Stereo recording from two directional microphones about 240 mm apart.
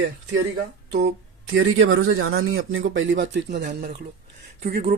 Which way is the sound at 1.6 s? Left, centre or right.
Right.